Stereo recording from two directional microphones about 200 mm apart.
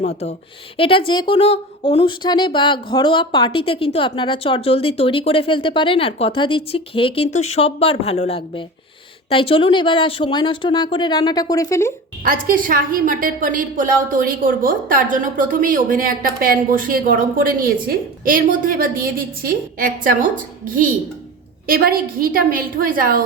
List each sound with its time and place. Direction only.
0.8 s speech: 25° left (ahead or behind)
12.2 s a woman's voice: 45° right (ahead or behind)